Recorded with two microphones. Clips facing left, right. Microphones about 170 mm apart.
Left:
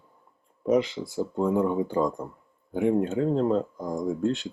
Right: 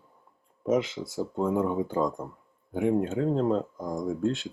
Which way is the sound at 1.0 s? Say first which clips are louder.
Left 2 dB; 5° left (ahead or behind).